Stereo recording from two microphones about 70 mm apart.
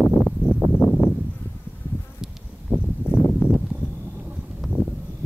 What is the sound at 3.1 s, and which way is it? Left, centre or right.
Clip-clop, left.